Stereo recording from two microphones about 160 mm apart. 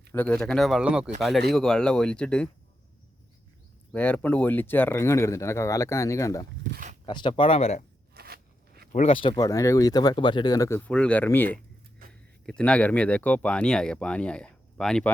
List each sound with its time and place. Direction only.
0.1 s speech: 10° left (ahead or behind)
3.9 s speech: 10° left (ahead or behind)
7.0 s speech: 30° left (ahead or behind)
8.1 s a sound: 75° right (ahead or behind)
8.9 s speech: 40° left (ahead or behind); by 15.1 s 5° left (ahead or behind)